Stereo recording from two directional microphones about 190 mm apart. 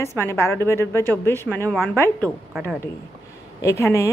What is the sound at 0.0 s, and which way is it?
A woman's voice, 15° left (ahead or behind).